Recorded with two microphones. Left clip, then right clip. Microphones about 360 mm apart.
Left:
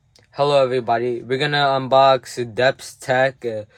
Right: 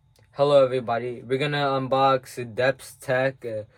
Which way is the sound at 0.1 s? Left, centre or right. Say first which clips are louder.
Left 2 dB; left.